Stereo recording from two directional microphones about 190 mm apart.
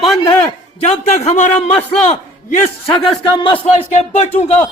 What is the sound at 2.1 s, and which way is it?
A man's voice, 35° left (ahead or behind).